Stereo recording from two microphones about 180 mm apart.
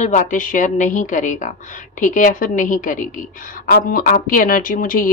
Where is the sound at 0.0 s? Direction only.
45° left (ahead or behind).